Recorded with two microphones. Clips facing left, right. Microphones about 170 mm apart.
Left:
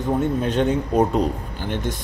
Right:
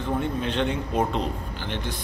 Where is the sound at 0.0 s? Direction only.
45° left (ahead or behind).